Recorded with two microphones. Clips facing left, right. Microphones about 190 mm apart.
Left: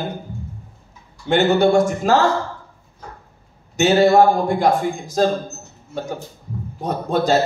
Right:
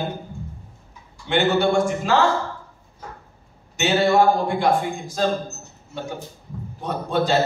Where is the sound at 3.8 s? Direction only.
40° left (ahead or behind).